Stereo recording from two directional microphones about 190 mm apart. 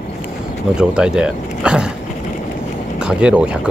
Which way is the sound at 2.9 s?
5° right (ahead or behind).